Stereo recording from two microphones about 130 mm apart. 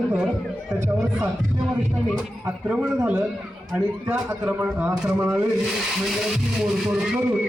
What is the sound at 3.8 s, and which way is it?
A man's voice, 15° right (ahead or behind).